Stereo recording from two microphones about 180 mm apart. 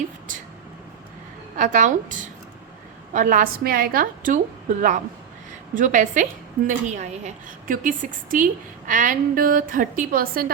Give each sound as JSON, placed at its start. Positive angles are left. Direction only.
{"t": 1.5, "sound": "a woman's voice", "side_deg": -45}